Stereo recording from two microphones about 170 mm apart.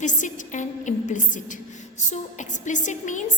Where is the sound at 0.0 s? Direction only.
45° left (ahead or behind).